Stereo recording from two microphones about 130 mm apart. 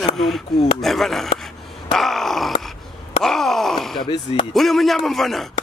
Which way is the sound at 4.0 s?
35° left (ahead or behind).